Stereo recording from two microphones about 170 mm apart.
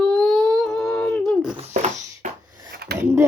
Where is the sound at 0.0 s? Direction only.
5° left (ahead or behind).